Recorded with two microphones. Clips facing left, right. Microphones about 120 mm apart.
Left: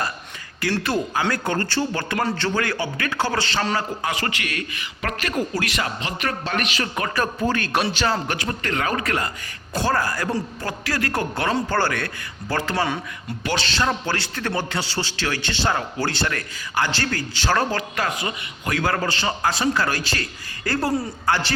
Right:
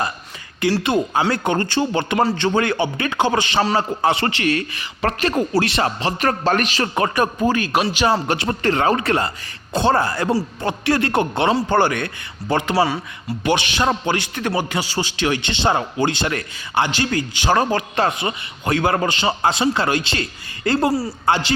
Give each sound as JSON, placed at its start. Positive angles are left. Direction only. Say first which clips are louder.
{"t": 0.6, "sound": "a man's voice", "louder": "right 5 dB", "side_deg": -20}
{"t": 3.8, "sound": "a man's voice", "louder": "right 7 dB", "side_deg": -30}
{"t": 7.2, "sound": "a man's voice", "louder": "right 2 dB", "side_deg": -15}
{"t": 8.1, "sound": "a man's voice", "louder": "right 5 dB", "side_deg": -25}